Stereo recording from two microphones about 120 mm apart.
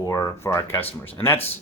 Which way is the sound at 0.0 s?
30° left (ahead or behind).